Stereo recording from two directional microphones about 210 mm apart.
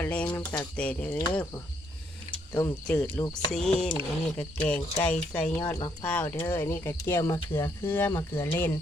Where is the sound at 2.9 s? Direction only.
5° left (ahead or behind).